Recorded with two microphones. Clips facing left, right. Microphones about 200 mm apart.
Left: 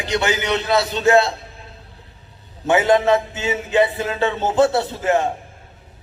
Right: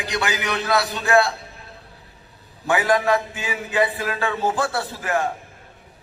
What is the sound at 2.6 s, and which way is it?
A man's voice, 25° left (ahead or behind).